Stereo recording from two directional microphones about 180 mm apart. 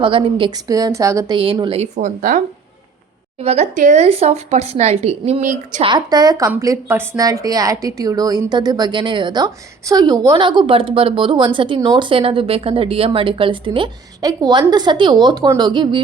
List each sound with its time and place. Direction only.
0.0 s a woman's voice: 30° right (ahead or behind)
1.4 s speech: 30° right (ahead or behind)
5.8 s a woman's voice: 25° right (ahead or behind)